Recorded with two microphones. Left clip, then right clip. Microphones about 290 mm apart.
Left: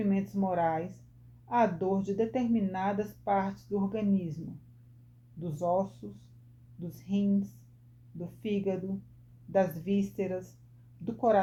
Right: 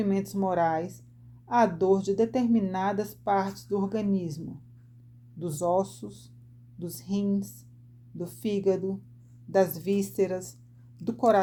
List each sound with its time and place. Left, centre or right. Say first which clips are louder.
0.1 s speech: right 4 dB; right
5.4 s speech: right 3 dB; right